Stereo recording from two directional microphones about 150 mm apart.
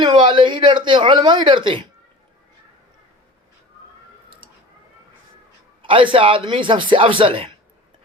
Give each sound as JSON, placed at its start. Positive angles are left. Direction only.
{"t": 0.0, "sound": "speech", "side_deg": -30}
{"t": 5.8, "sound": "speech", "side_deg": -35}